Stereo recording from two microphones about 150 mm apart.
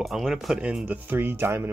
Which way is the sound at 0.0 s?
Centre (ahead or behind).